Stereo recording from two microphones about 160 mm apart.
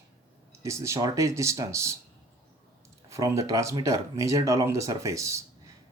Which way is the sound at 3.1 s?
20° right (ahead or behind).